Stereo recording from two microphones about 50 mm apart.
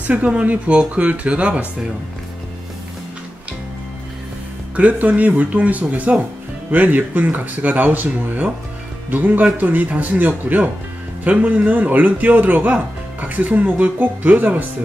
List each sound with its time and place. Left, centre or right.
0.0 s speech: right
4.7 s speech: right